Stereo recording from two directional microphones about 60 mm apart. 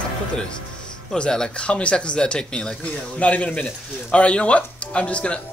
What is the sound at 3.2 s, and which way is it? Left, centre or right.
Speech, left.